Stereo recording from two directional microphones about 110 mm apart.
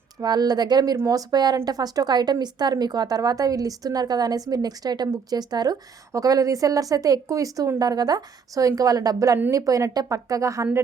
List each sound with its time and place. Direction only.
0.2 s a woman's voice: 40° right (ahead or behind)